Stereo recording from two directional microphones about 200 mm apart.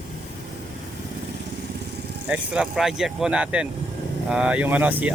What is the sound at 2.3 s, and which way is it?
Speech, 5° right (ahead or behind).